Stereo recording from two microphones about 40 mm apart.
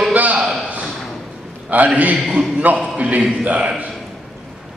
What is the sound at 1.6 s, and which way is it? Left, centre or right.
A man's voice, right.